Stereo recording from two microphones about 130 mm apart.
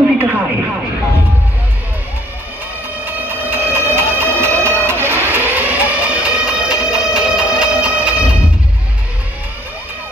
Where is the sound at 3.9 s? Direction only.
20° right (ahead or behind).